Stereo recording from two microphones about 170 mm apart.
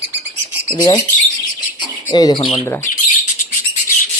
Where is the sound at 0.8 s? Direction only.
20° left (ahead or behind).